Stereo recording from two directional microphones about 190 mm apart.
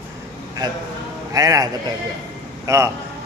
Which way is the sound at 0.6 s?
20° right (ahead or behind).